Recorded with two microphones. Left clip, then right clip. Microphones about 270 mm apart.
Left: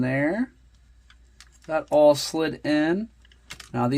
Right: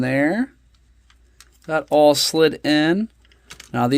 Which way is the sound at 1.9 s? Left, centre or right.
Right.